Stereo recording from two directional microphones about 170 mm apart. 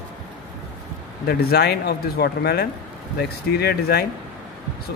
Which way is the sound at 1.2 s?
65° left (ahead or behind).